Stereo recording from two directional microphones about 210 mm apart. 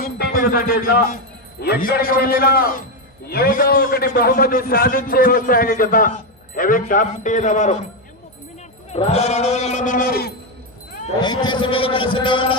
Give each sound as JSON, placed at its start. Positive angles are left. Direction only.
{"t": 0.0, "sound": "a man's voice", "side_deg": 40}
{"t": 8.9, "sound": "speech", "side_deg": 30}
{"t": 11.1, "sound": "a man's voice", "side_deg": 20}